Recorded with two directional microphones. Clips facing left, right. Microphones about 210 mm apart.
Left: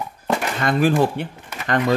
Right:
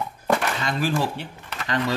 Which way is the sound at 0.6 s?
55° left (ahead or behind).